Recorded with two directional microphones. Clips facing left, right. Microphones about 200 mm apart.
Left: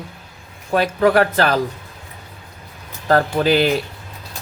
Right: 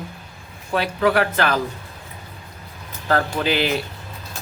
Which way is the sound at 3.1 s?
40° left (ahead or behind).